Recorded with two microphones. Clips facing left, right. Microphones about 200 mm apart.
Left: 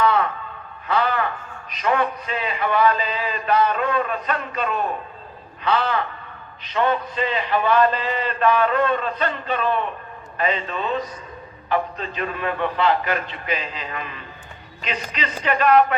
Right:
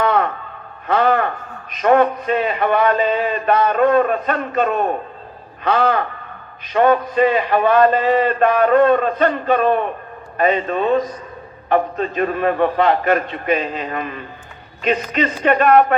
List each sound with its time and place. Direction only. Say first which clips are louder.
0.0 s music: right 2 dB; 50° right (ahead or behind)
0.9 s a man's voice: right 6 dB; 50° right (ahead or behind)